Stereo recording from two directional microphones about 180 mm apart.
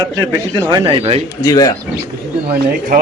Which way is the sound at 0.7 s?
30° right (ahead or behind).